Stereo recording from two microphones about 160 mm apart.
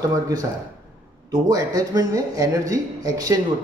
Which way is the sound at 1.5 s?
25° right (ahead or behind).